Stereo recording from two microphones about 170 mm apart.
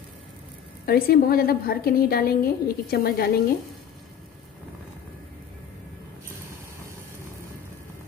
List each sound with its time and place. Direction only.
0.8 s a woman's voice: 60° left (ahead or behind)